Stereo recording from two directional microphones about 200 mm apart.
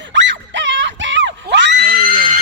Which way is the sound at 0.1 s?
65° right (ahead or behind).